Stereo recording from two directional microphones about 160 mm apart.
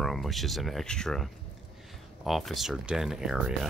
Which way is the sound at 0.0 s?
Centre (ahead or behind).